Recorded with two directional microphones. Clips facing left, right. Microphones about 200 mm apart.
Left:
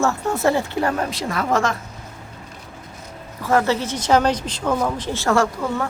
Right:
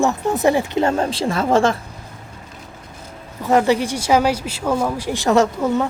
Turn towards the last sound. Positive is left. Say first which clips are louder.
# right 4 dB
turn(degrees=-20)  # may be behind; listen again after turning